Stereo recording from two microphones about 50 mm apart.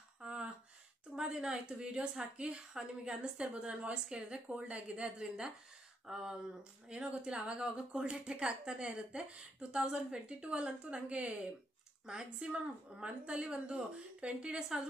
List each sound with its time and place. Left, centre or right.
0.2 s a sound: right
1.1 s a woman's voice: centre
6.0 s a woman's voice: centre